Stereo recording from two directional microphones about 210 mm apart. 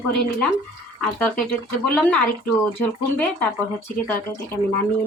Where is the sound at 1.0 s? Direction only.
5° left (ahead or behind).